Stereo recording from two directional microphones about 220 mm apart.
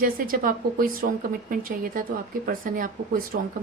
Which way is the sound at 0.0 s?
40° right (ahead or behind).